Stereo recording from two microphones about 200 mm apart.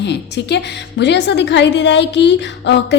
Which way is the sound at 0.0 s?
60° left (ahead or behind).